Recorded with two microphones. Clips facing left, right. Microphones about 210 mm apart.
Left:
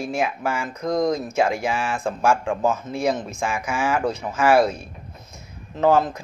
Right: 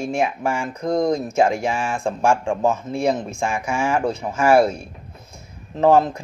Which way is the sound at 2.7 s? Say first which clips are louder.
Right 2 dB; 5° left (ahead or behind).